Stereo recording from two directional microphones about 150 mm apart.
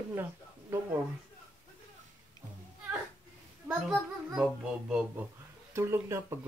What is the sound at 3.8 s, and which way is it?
Music, 5° right (ahead or behind).